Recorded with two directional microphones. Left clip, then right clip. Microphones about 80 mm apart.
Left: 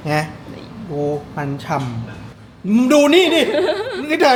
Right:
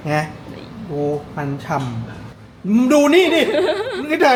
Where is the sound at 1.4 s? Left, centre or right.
Centre.